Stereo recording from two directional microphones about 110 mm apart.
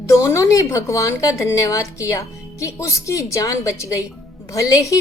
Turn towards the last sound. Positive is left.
turn(degrees=30)  # may be behind; listen again after turning